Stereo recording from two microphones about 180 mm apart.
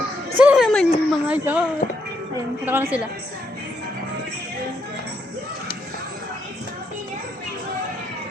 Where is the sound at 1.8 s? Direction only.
55° left (ahead or behind).